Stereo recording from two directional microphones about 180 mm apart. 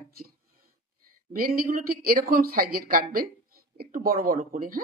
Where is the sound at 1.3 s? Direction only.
50° right (ahead or behind).